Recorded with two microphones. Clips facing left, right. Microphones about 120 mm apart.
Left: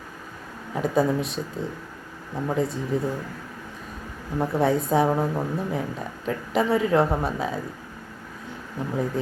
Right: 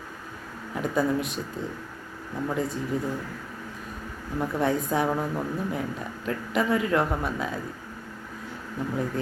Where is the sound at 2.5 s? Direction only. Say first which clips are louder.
Left 4 dB; 25° left (ahead or behind).